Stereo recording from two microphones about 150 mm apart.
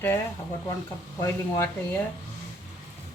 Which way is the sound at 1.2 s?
20° left (ahead or behind).